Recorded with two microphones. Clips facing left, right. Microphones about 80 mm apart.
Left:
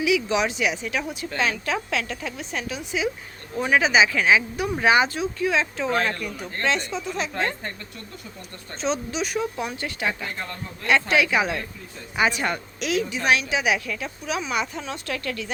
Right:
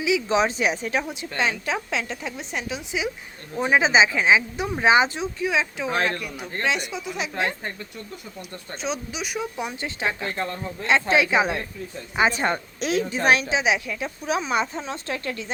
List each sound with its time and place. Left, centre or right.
0.0 s a woman's voice: right; by 7.7 s centre
8.8 s a woman's voice: centre; by 13.5 s right
13.5 s a woman's voice: right
14.3 s a woman's voice: right